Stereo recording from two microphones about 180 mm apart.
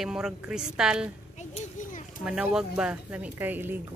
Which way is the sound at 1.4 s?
40° left (ahead or behind).